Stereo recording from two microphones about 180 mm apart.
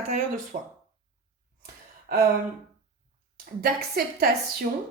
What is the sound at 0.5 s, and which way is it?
Speech, 45° right (ahead or behind).